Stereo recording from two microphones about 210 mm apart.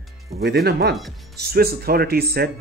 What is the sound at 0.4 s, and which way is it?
Speech, 50° right (ahead or behind).